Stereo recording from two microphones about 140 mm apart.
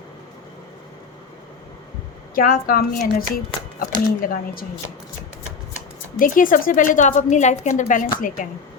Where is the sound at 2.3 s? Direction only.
90° left.